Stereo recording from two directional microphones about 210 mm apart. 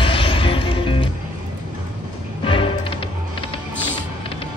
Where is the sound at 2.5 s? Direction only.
25° left (ahead or behind).